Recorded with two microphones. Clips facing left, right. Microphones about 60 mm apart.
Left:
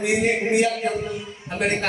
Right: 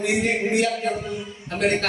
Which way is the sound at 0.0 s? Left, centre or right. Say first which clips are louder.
Left 1 dB; centre.